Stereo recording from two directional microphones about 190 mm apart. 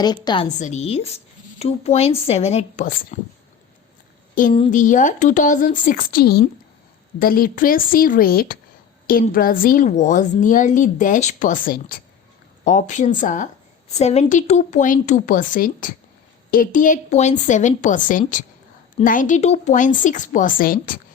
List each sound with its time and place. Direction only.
0.0 s a woman's voice: 20° left (ahead or behind)
0.6 s speech: 35° left (ahead or behind)
4.4 s a woman's voice: 45° left (ahead or behind)